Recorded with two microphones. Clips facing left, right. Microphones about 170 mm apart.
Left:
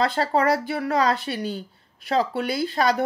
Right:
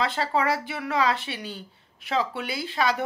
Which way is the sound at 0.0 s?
40° left (ahead or behind).